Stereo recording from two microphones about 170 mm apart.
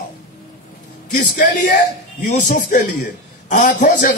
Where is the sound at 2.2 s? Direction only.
50° left (ahead or behind).